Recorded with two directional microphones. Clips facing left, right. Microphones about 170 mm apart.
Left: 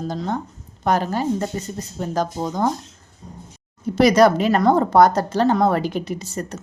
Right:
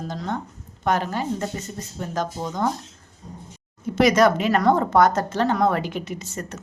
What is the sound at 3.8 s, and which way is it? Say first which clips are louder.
A woman's voice: left 3 dB; 35° left (ahead or behind).